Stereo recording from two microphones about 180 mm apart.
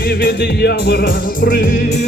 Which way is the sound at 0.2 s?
65° left (ahead or behind).